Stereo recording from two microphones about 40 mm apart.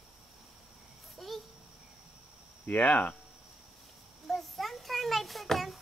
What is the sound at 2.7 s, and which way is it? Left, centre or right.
Speech, left.